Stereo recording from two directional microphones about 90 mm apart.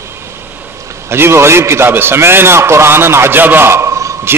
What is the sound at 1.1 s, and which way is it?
A man's voice, 30° right (ahead or behind).